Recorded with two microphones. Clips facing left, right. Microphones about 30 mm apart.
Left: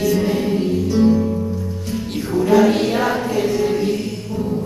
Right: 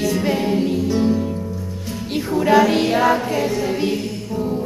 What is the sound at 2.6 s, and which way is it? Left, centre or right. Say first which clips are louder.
Music: even; centre.